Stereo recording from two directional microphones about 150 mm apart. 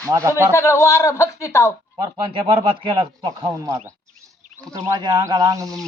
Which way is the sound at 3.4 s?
15° right (ahead or behind).